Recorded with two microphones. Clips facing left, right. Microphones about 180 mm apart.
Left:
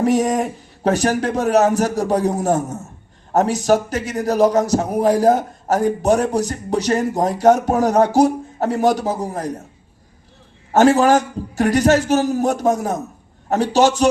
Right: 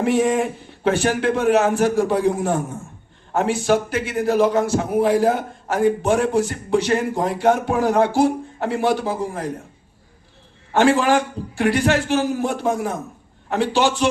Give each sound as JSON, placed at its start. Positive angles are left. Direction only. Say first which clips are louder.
{"t": 0.0, "sound": "a man's voice", "louder": "left 1 dB", "side_deg": 40}
{"t": 10.7, "sound": "a man's voice", "louder": "left 3 dB", "side_deg": 40}